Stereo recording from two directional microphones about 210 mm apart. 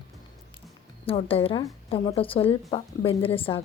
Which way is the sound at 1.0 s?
25° left (ahead or behind).